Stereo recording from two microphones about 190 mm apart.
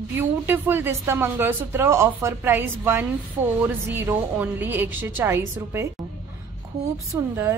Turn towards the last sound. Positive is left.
turn(degrees=-15)  # may be behind; listen again after turning